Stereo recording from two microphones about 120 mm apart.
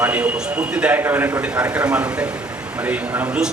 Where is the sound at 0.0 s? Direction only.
15° right (ahead or behind).